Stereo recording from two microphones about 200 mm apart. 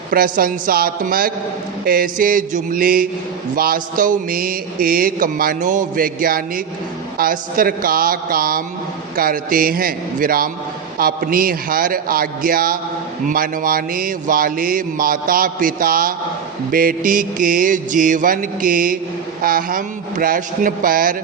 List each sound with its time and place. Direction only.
0.1 s speech: 45° right (ahead or behind)